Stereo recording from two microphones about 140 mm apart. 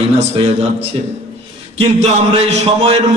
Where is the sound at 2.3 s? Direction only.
45° right (ahead or behind).